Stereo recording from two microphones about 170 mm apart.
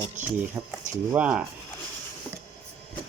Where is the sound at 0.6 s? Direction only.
20° right (ahead or behind).